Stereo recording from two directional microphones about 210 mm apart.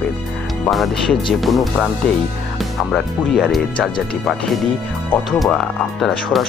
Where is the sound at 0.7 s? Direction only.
Centre (ahead or behind).